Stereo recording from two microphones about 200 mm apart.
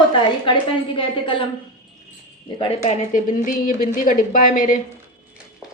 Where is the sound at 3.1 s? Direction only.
40° left (ahead or behind).